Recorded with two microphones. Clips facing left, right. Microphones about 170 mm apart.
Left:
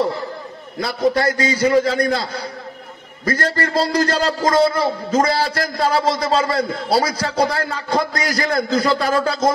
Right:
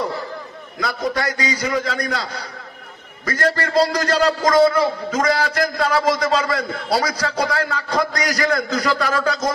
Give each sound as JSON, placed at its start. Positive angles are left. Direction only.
{"t": 0.7, "sound": "a man's voice", "side_deg": 30}
{"t": 3.3, "sound": "a man's voice", "side_deg": 30}